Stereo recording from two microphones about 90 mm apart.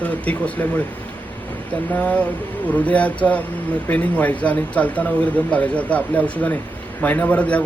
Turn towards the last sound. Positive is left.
turn(degrees=15)  # may be behind; listen again after turning